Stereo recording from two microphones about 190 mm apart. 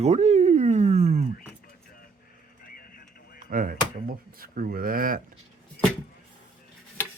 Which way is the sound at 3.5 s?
45° right (ahead or behind).